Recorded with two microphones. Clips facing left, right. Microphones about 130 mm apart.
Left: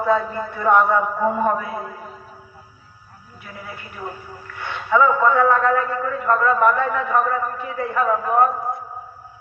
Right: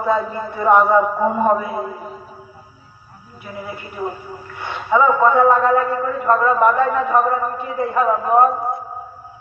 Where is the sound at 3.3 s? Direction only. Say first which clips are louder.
Right 6 dB; 15° right (ahead or behind).